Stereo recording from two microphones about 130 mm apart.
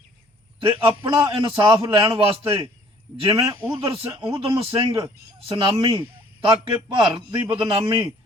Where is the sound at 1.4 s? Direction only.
30° right (ahead or behind).